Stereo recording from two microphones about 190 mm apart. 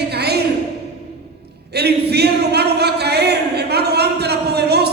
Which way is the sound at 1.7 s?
60° right (ahead or behind).